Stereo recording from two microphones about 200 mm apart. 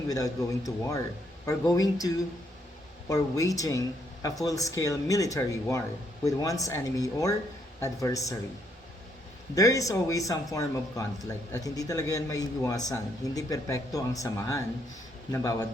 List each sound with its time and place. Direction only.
0.1 s a man's voice: 15° left (ahead or behind)
9.6 s a man's voice: 15° left (ahead or behind)